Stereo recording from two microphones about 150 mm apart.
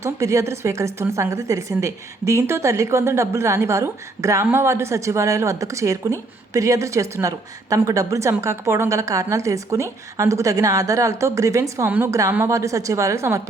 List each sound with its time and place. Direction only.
0.0 s a woman's voice: 20° right (ahead or behind)
11.9 s a woman's voice: 10° right (ahead or behind)